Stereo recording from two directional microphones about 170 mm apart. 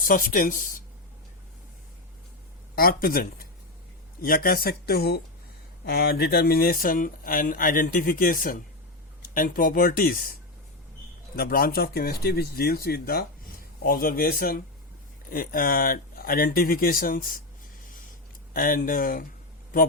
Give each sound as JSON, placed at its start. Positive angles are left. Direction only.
{"t": 0.0, "sound": "speech", "side_deg": 55}
{"t": 2.7, "sound": "speech", "side_deg": 60}
{"t": 11.3, "sound": "speech", "side_deg": 60}
{"t": 18.5, "sound": "speech", "side_deg": 60}